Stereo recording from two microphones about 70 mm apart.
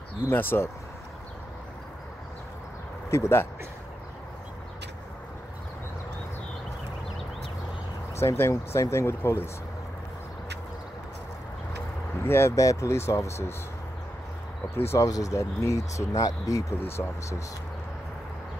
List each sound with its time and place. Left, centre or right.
0.3 s speech: left
3.1 s speech: left
8.2 s speech: left
12.3 s speech: left
12.5 s speech: left
14.8 s speech: left
15.0 s speech: left
16.1 s speech: left
16.9 s speech: left